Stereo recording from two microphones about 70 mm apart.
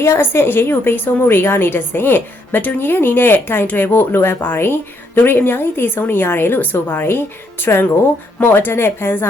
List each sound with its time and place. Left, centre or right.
0.0 s a woman's voice: left